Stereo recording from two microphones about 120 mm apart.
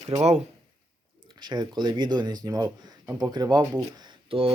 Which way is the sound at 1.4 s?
35° right (ahead or behind).